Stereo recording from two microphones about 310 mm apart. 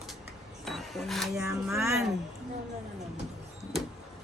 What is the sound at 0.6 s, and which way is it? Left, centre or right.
Cash register, centre.